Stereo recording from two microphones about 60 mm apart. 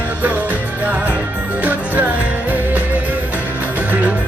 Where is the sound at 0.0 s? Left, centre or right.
Right.